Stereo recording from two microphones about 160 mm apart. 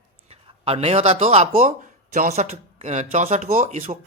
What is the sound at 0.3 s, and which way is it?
A man's voice, 40° right (ahead or behind).